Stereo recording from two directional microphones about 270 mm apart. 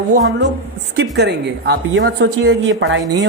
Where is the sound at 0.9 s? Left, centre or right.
Right.